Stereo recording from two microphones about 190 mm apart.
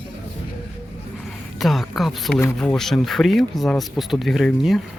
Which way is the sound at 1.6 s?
Centre (ahead or behind).